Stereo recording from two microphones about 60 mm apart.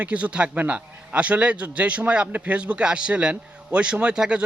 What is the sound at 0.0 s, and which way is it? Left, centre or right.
Speech, right.